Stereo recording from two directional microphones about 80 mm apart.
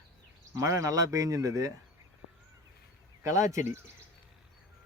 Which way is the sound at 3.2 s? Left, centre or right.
Right.